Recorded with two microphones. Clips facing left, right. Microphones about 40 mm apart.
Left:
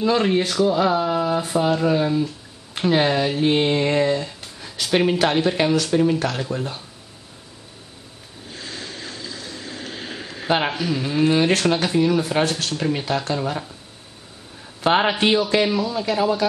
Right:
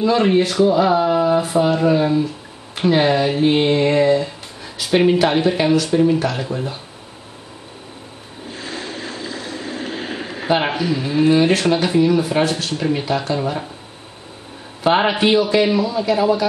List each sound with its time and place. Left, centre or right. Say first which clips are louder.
0.2 s speech: right 4 dB; centre
8.5 s a sound: right 5 dB; centre
10.8 s speech: right 3 dB; centre
15.0 s speech: right 3 dB; centre